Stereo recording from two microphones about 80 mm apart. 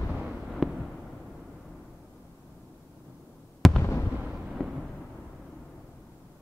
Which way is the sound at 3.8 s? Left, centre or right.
Left.